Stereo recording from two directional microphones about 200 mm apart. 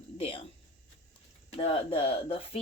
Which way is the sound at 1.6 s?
30° left (ahead or behind).